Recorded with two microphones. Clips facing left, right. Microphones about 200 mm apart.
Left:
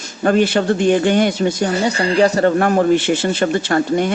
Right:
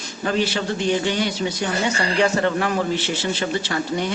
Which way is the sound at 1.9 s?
35° left (ahead or behind).